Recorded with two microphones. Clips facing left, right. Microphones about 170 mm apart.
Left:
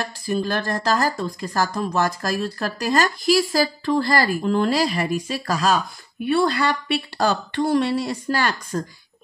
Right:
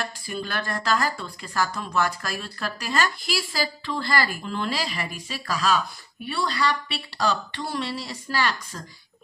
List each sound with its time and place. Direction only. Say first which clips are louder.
0.0 s speech: left 7 dB; 40° left (ahead or behind)